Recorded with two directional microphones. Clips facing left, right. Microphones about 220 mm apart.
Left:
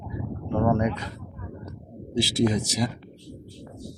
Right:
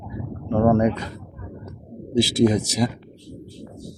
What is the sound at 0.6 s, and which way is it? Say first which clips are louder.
Speech: right 6 dB; 45° right (ahead or behind).